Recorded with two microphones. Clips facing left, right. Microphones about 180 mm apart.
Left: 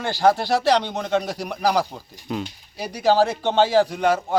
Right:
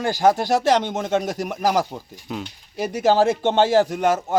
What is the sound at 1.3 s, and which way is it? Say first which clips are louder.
Speech: right 1 dB; 45° right (ahead or behind).